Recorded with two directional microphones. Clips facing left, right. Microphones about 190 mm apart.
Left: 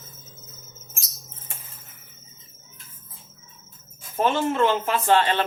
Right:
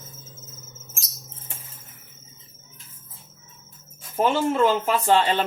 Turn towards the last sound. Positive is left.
turn(degrees=-15)  # may be behind; listen again after turning